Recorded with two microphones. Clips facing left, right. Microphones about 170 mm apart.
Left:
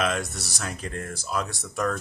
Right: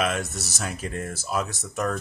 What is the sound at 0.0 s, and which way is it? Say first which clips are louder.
Speech: even; centre (ahead or behind).